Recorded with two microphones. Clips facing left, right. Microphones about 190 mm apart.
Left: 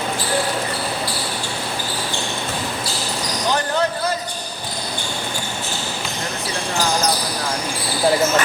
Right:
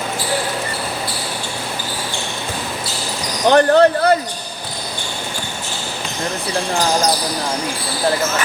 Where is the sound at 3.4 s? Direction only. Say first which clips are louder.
Right 10 dB; 65° right (ahead or behind).